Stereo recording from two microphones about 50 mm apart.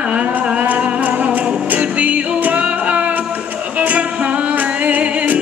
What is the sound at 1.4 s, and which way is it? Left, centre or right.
Music, centre.